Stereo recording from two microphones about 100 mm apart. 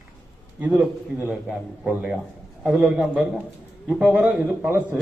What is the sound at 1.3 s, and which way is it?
A man's voice, 5° right (ahead or behind).